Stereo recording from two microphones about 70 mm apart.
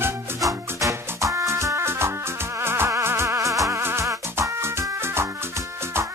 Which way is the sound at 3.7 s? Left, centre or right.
Right.